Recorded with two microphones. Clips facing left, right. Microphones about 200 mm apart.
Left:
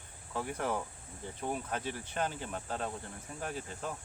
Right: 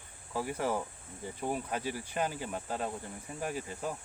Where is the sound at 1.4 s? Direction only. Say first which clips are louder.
Right 2 dB; 5° right (ahead or behind).